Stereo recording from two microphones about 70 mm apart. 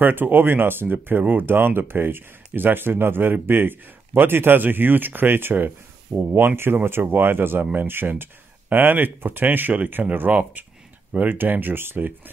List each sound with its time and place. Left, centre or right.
0.0 s speech: right